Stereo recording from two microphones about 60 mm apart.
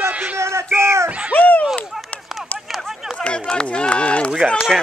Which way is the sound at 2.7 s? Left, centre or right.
Centre.